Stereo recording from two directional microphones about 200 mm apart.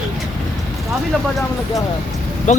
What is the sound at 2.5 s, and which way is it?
Speech, 35° left (ahead or behind).